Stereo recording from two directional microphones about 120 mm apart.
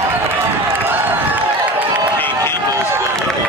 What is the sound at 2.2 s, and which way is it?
Run, 20° left (ahead or behind).